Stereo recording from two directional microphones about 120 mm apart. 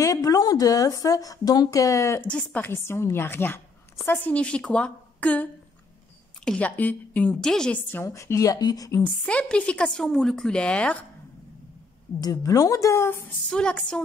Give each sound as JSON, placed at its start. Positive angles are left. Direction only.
{"t": 0.0, "sound": "speech", "side_deg": 30}
{"t": 2.2, "sound": "a woman's voice", "side_deg": 10}
{"t": 2.6, "sound": "a woman's voice", "side_deg": 20}
{"t": 8.0, "sound": "speech", "side_deg": 25}
{"t": 9.0, "sound": "a woman's voice", "side_deg": 10}
{"t": 12.2, "sound": "speech", "side_deg": 30}
{"t": 13.5, "sound": "a woman's voice", "side_deg": 10}